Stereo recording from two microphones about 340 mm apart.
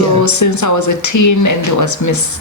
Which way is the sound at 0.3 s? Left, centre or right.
Left.